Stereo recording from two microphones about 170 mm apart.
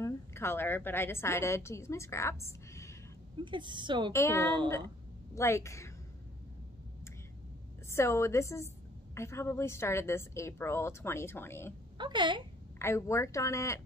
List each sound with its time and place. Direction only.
0.0 s a woman's voice: 15° left (ahead or behind)
3.4 s a woman's voice: 30° right (ahead or behind)
4.1 s a woman's voice: 15° left (ahead or behind)
7.9 s a woman's voice: 15° left (ahead or behind)
12.0 s a woman's voice: 25° right (ahead or behind)
12.7 s a woman's voice: 15° left (ahead or behind)